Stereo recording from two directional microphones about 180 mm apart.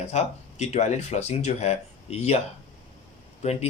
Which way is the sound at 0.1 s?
40° left (ahead or behind).